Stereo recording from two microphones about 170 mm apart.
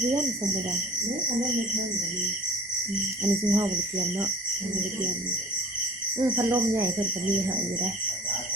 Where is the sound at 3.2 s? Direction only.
20° right (ahead or behind).